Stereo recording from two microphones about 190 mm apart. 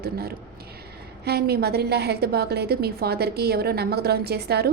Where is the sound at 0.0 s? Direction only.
55° right (ahead or behind).